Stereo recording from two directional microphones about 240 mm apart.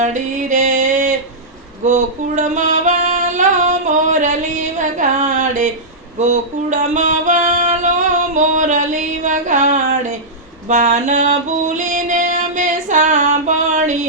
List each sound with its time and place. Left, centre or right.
0.0 s music: right